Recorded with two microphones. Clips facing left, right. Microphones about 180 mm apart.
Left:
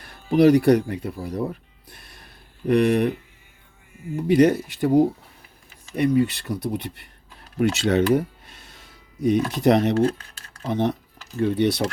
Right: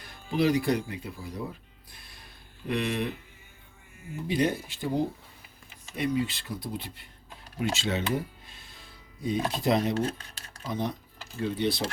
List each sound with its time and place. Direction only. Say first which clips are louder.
0.0 s speech: left 10 dB; 65° left (ahead or behind)
2.6 s speech: left 11 dB; 60° left (ahead or behind)
4.4 s speech: left 10 dB; 75° left (ahead or behind)
6.0 s speech: left 9 dB; 65° left (ahead or behind)